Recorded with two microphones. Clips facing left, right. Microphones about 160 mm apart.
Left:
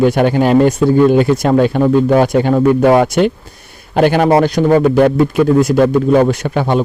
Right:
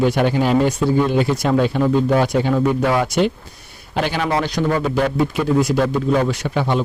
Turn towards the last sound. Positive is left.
turn(degrees=50)  # may be behind; listen again after turning